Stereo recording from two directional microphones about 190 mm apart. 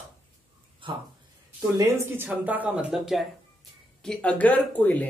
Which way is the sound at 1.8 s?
10° right (ahead or behind).